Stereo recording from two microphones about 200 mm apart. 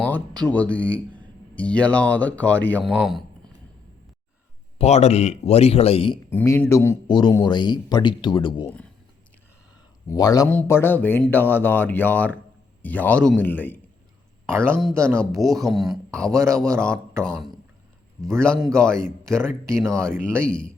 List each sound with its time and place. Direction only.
0.0 s speech: 5° left (ahead or behind)
4.8 s speech: 35° left (ahead or behind)
6.3 s speech: 10° left (ahead or behind)
8.6 s speech: 5° left (ahead or behind)
10.1 s speech: 20° left (ahead or behind)
15.1 s speech: 5° left (ahead or behind)
18.2 s speech: 5° left (ahead or behind)
19.4 s speech: 15° right (ahead or behind)
19.9 s speech: 5° left (ahead or behind)